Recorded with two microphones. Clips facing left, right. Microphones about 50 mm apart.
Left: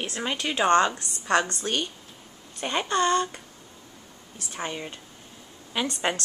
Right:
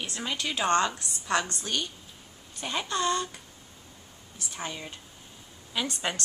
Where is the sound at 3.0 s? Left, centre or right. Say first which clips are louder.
Left 5 dB; left.